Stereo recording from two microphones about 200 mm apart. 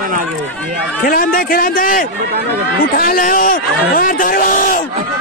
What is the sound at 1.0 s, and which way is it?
Speech, 45° left (ahead or behind).